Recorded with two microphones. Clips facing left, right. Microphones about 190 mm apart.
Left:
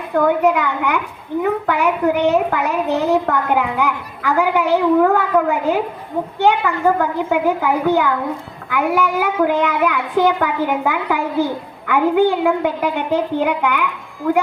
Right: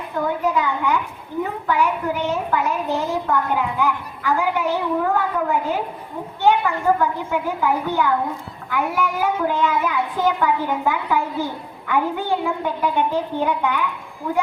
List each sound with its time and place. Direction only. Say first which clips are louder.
0.3 s a child's voice: left 4 dB; 75° left (ahead or behind)